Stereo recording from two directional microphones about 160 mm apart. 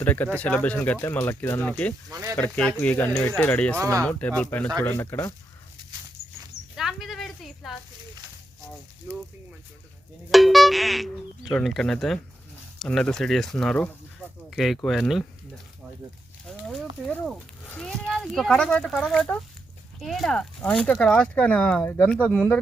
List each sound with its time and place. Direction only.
0.0 s speech: 10° left (ahead or behind)
2.0 s speech: 20° right (ahead or behind)
2.3 s speech: 5° left (ahead or behind)
3.8 s speech: 20° right (ahead or behind)
4.0 s speech: 10° left (ahead or behind)
6.7 s a sound: centre (ahead or behind)
10.3 s speech: centre (ahead or behind)
16.5 s a child's voice: centre (ahead or behind)